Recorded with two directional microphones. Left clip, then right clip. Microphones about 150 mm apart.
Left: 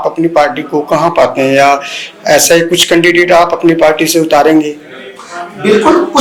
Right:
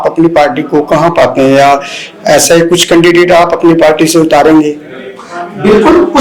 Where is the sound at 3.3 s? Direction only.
30° right (ahead or behind).